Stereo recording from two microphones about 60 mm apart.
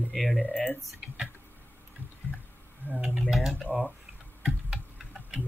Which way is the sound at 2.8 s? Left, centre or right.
Right.